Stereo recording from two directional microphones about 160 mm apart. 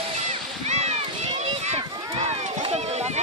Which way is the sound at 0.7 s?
45° right (ahead or behind).